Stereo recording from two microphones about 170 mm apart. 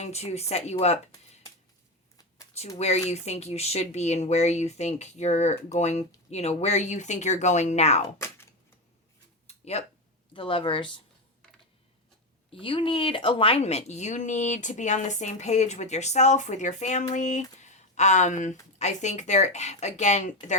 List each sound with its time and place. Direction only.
0.0 s speech: 40° left (ahead or behind)
2.6 s speech: 40° left (ahead or behind)
9.5 s a sound: 40° left (ahead or behind)
10.3 s speech: 30° left (ahead or behind)
12.5 s speech: 30° left (ahead or behind)